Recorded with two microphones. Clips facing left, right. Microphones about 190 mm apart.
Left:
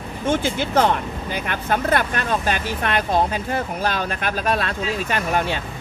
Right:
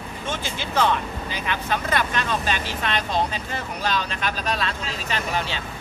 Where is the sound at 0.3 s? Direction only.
50° left (ahead or behind).